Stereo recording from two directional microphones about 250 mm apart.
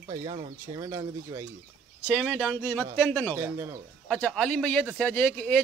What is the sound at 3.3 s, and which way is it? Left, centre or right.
Speech, centre.